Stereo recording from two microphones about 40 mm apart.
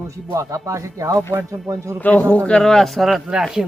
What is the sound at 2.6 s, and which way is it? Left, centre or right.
Speech, centre.